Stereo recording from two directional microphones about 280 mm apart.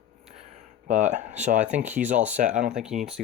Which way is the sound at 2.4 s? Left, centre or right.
Right.